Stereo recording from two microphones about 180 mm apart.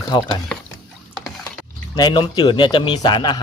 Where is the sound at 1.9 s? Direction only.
25° left (ahead or behind).